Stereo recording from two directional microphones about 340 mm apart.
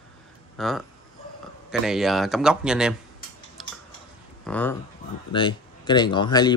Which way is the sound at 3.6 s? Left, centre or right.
Centre.